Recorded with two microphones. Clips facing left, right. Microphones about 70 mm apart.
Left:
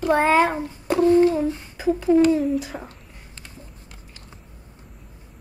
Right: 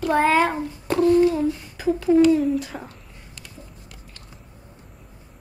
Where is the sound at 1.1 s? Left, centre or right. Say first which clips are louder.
Left 1 dB; left.